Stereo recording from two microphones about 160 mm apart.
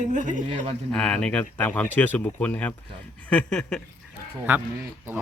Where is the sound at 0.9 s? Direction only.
5° left (ahead or behind).